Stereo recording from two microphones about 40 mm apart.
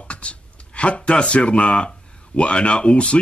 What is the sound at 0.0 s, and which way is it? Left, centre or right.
A man's voice, left.